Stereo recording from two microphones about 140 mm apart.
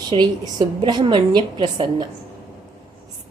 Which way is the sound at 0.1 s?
40° right (ahead or behind).